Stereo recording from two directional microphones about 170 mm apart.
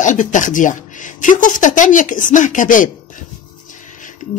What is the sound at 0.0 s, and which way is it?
Speech, 45° left (ahead or behind).